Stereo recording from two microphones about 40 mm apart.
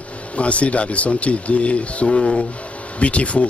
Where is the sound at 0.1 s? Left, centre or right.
Left.